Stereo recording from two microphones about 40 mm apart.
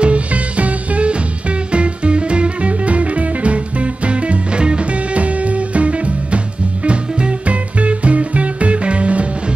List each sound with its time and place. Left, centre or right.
0.0 s music: right